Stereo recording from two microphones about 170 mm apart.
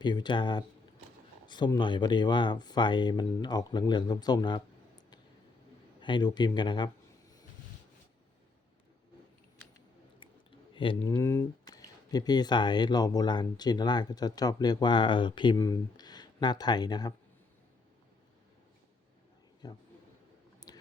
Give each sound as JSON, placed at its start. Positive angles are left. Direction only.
{"t": 0.0, "sound": "speech", "side_deg": 25}
{"t": 11.0, "sound": "speech", "side_deg": 15}
{"t": 15.5, "sound": "speech", "side_deg": 15}
{"t": 19.6, "sound": "speech", "side_deg": 20}
{"t": 20.7, "sound": "a sound", "side_deg": 25}